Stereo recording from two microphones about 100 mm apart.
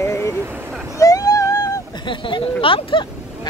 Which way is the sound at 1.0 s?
35° left (ahead or behind).